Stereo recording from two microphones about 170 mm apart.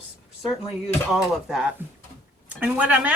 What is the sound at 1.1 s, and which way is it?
A woman's voice, 5° right (ahead or behind).